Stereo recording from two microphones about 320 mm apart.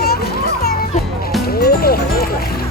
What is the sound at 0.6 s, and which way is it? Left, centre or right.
Music, left.